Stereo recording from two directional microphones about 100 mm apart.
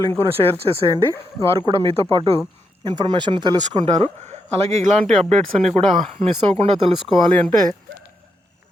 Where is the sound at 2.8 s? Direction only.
50° right (ahead or behind).